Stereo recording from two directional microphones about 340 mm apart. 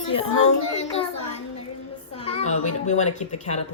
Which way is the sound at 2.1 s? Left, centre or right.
Centre.